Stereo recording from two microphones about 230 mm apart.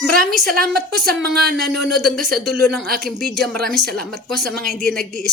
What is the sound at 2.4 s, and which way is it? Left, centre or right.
Speech, right.